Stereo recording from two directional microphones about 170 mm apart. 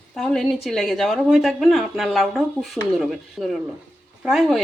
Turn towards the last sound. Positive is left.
turn(degrees=0)  # may be behind; listen again after turning